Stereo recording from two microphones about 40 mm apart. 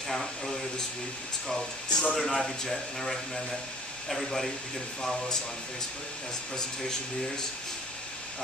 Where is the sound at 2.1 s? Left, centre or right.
Centre.